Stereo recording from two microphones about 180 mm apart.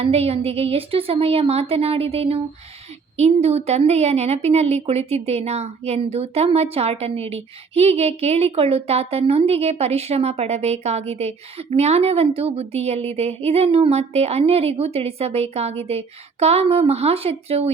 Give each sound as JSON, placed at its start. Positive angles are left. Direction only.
{"t": 0.0, "sound": "a woman's voice", "side_deg": -35}